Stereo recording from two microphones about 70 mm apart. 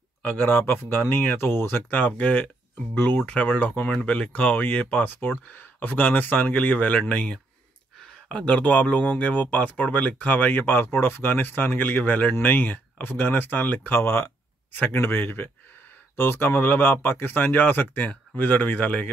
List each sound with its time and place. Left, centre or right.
0.2 s speech: left